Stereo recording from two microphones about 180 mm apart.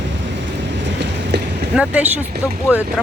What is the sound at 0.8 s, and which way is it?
Vehicle, 75° right (ahead or behind).